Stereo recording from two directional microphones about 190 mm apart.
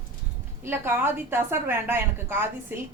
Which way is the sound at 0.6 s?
10° right (ahead or behind).